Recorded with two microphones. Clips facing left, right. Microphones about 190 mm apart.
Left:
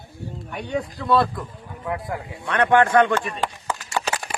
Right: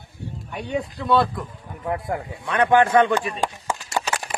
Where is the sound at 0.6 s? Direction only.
30° right (ahead or behind).